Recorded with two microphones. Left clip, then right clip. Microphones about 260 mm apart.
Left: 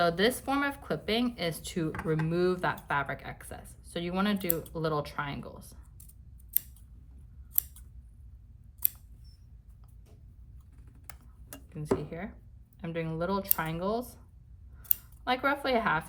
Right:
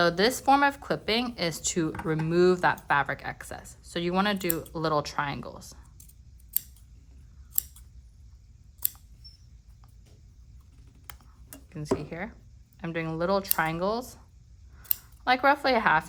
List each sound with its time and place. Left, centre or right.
0.0 s speech: right
11.7 s speech: right
15.2 s speech: right